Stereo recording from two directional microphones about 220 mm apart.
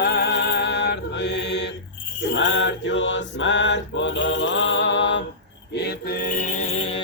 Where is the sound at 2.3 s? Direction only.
55° left (ahead or behind).